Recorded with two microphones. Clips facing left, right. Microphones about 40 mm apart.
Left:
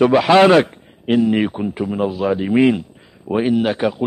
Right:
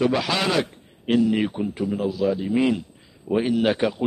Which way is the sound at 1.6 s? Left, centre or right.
Left.